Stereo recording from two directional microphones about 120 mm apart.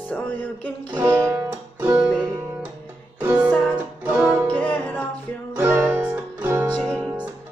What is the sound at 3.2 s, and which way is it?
Music, 15° right (ahead or behind).